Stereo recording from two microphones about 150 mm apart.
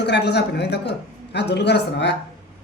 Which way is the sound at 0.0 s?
90° left.